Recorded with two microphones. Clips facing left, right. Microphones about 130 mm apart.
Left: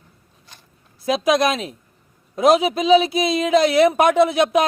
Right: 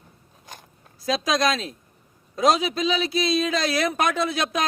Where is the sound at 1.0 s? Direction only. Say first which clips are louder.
Left 5 dB; 20° left (ahead or behind).